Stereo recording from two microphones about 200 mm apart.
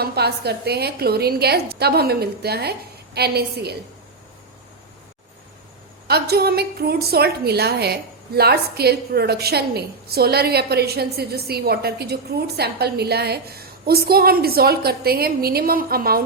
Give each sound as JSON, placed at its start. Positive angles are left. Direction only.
{"t": 0.0, "sound": "a woman's voice", "side_deg": -55}
{"t": 6.1, "sound": "a woman's voice", "side_deg": -55}